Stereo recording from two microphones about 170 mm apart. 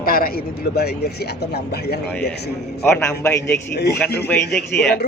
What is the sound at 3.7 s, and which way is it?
Speech, 75° left (ahead or behind).